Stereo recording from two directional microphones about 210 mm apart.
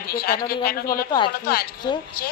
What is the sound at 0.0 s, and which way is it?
Speech, 45° left (ahead or behind).